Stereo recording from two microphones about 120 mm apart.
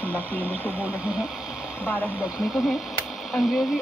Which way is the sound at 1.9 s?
15° left (ahead or behind).